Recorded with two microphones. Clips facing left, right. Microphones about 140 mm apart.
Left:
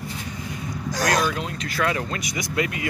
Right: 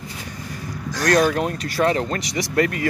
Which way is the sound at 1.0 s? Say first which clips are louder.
Right 6 dB; 50° right (ahead or behind).